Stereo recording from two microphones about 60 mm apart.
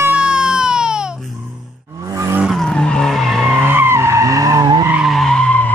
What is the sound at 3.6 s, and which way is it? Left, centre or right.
Skidding, right.